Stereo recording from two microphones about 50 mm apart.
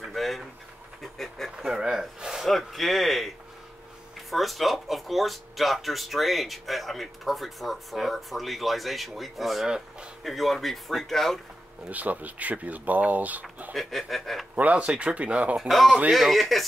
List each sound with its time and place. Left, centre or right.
0.1 s a sound: centre
1.6 s speech: centre
2.4 s speech: centre
4.3 s speech: centre
9.7 s speech: centre
10.2 s speech: centre
11.9 s speech: right
13.7 s speech: centre
14.5 s speech: right
15.5 s speech: centre